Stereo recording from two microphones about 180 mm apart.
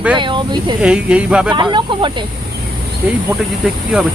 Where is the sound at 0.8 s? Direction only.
5° right (ahead or behind).